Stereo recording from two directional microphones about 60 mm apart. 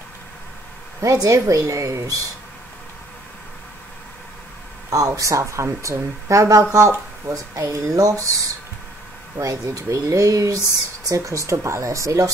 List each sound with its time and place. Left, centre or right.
1.0 s speech: right
4.8 s speech: right
9.4 s speech: right